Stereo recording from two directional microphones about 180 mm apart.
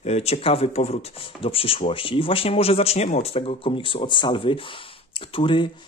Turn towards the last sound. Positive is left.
turn(degrees=30)  # may be behind; listen again after turning